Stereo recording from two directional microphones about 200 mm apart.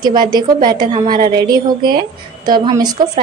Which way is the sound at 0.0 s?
20° right (ahead or behind).